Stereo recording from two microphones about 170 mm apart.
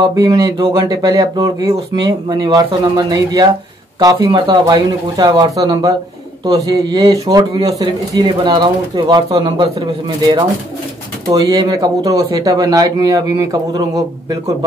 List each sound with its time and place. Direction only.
0.0 s speech: 20° right (ahead or behind)